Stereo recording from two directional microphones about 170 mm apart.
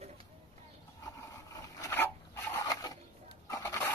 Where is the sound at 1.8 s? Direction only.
15° left (ahead or behind).